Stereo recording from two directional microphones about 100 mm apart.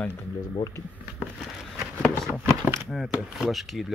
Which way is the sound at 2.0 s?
5° left (ahead or behind).